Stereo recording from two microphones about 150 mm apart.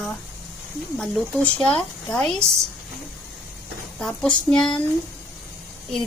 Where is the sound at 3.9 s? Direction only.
5° left (ahead or behind).